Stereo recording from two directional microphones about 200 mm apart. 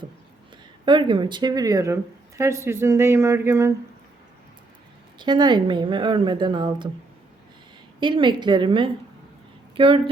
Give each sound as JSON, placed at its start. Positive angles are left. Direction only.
{"t": 0.9, "sound": "speech", "side_deg": -25}
{"t": 5.2, "sound": "speech", "side_deg": -20}
{"t": 7.9, "sound": "speech", "side_deg": -25}